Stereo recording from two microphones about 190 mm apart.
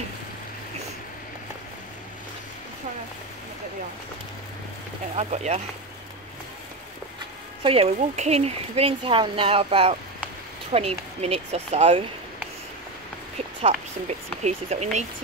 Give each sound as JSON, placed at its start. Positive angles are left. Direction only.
{"t": 5.1, "sound": "speech", "side_deg": -35}
{"t": 7.6, "sound": "speech", "side_deg": -30}
{"t": 14.4, "sound": "speech", "side_deg": -35}